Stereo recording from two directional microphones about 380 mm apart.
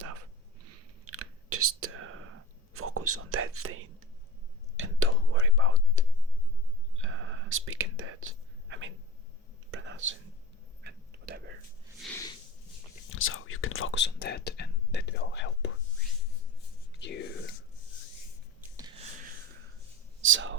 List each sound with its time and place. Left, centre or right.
0.7 s whispering: right
2.7 s speech: right
4.8 s whispering: right
10.8 s a sound: right
11.9 s a sound: centre
13.1 s speech: left
17.0 s speech: left
18.8 s a sound: centre
20.2 s speech: right